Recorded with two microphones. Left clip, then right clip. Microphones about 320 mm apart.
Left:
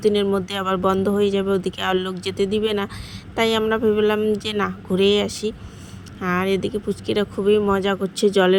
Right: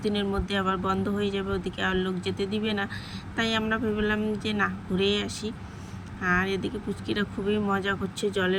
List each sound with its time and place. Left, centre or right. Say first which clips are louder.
0.0 s speech: left 10 dB; centre